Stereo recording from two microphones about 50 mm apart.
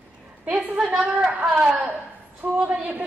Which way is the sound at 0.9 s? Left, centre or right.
Centre.